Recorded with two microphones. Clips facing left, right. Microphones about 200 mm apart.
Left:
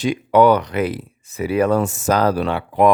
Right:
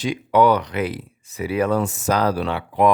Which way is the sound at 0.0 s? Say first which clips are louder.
Left 3 dB; 55° left (ahead or behind).